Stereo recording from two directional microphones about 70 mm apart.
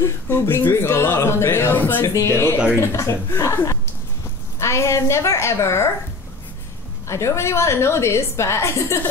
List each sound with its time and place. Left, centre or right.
0.0 s speech: left
2.0 s a woman's voice: left
7.1 s speech: left